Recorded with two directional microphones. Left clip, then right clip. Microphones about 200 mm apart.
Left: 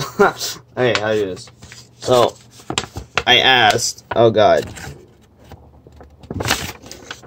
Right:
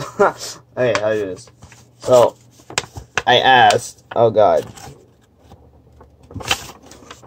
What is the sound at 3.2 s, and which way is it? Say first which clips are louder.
Speech: right 1 dB; 15° left (ahead or behind).